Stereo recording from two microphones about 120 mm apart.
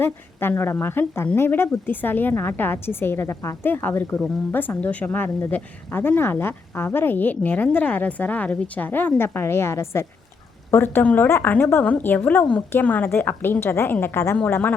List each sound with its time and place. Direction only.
0.0 s speech: 20° left (ahead or behind)